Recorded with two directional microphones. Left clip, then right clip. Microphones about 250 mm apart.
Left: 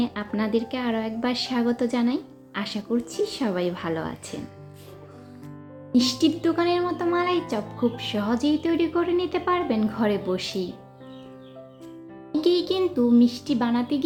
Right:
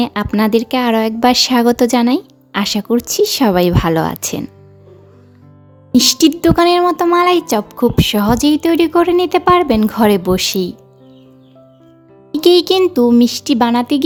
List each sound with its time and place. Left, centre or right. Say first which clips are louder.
0.0 s speech: right 12 dB; right
5.9 s speech: right 11 dB; right
12.3 s speech: right 12 dB; right